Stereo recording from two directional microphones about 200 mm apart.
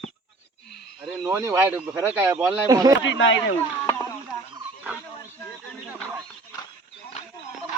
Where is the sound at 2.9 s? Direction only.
65° left (ahead or behind).